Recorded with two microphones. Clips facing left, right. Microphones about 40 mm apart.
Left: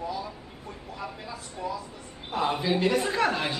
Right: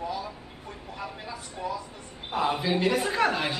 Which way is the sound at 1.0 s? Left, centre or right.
Centre.